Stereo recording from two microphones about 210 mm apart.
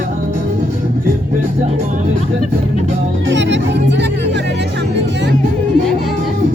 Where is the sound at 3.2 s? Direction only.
60° right (ahead or behind).